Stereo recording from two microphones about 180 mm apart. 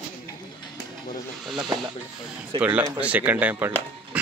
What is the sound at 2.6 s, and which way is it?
Speech, 10° right (ahead or behind).